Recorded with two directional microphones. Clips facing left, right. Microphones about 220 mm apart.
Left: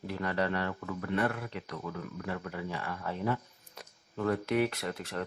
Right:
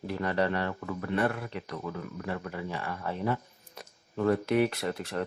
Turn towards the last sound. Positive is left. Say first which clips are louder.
# right 4 dB
turn(degrees=-30)  # may be behind; listen again after turning